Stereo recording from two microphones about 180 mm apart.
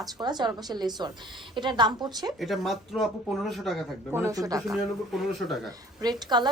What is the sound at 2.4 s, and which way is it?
Speech, centre (ahead or behind).